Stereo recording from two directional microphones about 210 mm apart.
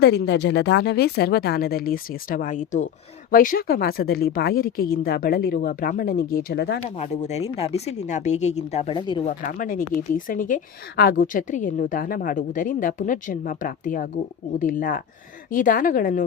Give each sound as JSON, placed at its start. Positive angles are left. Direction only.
{"t": 0.0, "sound": "speech", "side_deg": 50}
{"t": 6.9, "sound": "speech", "side_deg": 30}
{"t": 9.2, "sound": "speech", "side_deg": 40}